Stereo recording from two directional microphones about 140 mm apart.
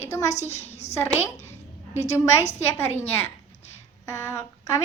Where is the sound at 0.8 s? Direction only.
50° left (ahead or behind).